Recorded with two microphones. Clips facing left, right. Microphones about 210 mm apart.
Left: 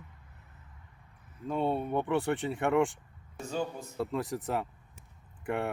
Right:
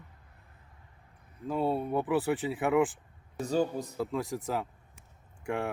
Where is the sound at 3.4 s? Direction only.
35° right (ahead or behind).